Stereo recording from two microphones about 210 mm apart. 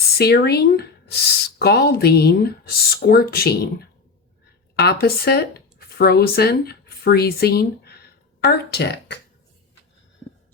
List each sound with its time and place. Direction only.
0.2 s speech: 50° left (ahead or behind)
4.8 s speech: 50° left (ahead or behind)